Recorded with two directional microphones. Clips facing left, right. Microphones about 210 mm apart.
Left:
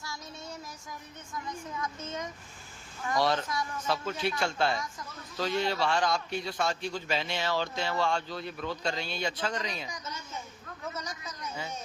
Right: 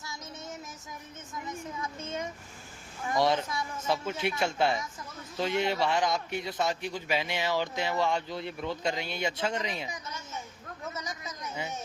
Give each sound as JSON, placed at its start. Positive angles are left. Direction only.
{"t": 0.0, "sound": "child singing", "side_deg": -20}
{"t": 1.5, "sound": "a man's voice", "side_deg": -30}